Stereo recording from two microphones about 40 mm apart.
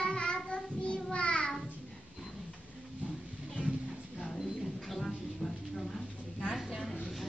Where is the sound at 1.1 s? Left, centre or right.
Left.